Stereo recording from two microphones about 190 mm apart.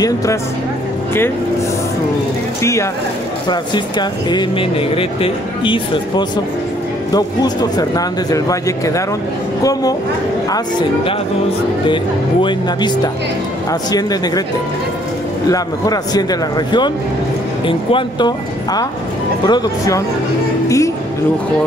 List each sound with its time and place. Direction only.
2.6 s speech: 15° left (ahead or behind)
11.9 s speech: 25° left (ahead or behind)
15.4 s speech: 20° left (ahead or behind)